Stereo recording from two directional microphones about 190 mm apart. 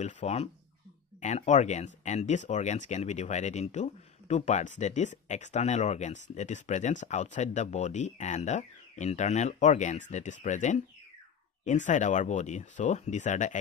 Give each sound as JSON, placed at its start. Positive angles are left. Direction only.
{"t": 0.0, "sound": "speech", "side_deg": 35}